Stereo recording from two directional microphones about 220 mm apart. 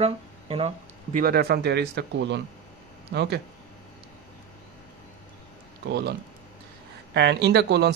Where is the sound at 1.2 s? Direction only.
45° right (ahead or behind).